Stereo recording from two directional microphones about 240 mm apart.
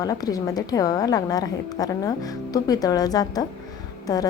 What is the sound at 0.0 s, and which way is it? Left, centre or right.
Speech, centre.